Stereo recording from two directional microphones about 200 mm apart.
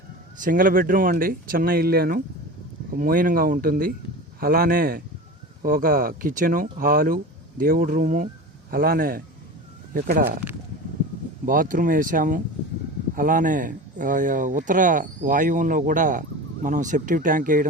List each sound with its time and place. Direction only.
0.3 s speech: 40° right (ahead or behind)
11.4 s speech: 45° right (ahead or behind)